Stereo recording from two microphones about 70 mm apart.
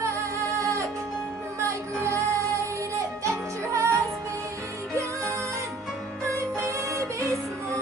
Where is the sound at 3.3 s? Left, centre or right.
Right.